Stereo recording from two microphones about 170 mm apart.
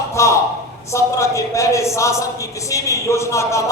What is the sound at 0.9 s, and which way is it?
A man's voice, 15° left (ahead or behind).